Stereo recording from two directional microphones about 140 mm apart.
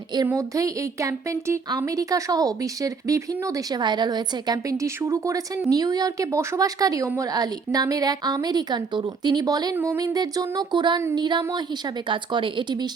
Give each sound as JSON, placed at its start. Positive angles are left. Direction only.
{"t": 0.3, "sound": "a woman's voice", "side_deg": -20}
{"t": 9.7, "sound": "speech", "side_deg": -15}
{"t": 10.0, "sound": "speech", "side_deg": -25}